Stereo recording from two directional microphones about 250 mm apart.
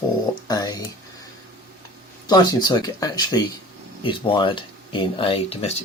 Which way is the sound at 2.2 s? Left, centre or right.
Centre.